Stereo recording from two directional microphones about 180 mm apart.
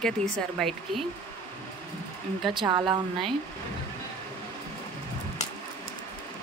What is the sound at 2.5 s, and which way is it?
Speech, 25° right (ahead or behind).